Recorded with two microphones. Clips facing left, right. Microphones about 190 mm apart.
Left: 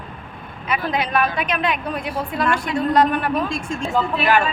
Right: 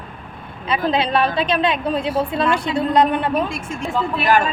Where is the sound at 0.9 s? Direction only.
30° right (ahead or behind).